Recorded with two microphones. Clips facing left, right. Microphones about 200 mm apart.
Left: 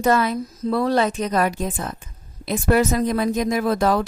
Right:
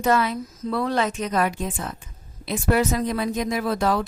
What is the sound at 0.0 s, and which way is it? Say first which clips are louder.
A woman's voice: left 2 dB; 40° left (ahead or behind).